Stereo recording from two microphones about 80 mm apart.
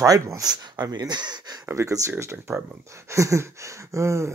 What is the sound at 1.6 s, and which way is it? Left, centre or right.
Speech, right.